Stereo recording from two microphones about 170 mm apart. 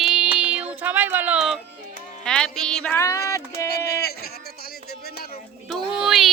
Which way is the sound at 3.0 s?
20° left (ahead or behind).